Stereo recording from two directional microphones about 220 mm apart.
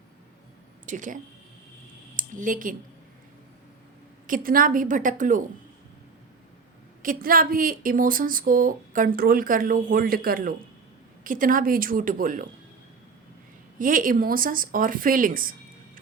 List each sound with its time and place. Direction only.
0.9 s speech: 35° right (ahead or behind)
4.3 s speech: 40° right (ahead or behind)
7.0 s speech: 40° right (ahead or behind)
13.7 s speech: 40° right (ahead or behind)